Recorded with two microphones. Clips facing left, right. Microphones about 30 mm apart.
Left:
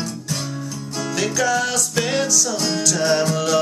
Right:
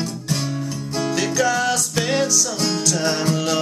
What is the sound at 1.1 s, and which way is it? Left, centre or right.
Music, centre.